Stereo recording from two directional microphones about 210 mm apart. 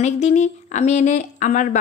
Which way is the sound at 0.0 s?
35° left (ahead or behind).